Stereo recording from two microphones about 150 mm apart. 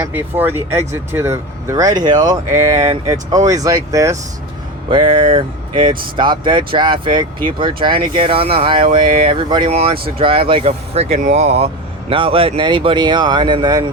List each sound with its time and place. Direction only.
0.1 s speech: 10° right (ahead or behind)
4.9 s speech: 35° right (ahead or behind)